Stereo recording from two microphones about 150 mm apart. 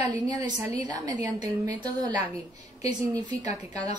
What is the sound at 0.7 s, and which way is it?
A woman's voice, 25° right (ahead or behind).